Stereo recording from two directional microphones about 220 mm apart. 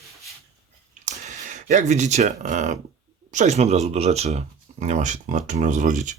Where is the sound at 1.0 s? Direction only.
35° right (ahead or behind).